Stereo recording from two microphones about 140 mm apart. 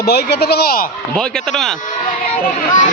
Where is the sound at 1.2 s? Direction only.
5° left (ahead or behind).